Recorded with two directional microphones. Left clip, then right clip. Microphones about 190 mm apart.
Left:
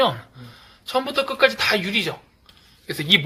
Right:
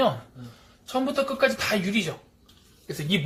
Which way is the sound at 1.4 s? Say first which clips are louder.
Left 8 dB; 40° left (ahead or behind).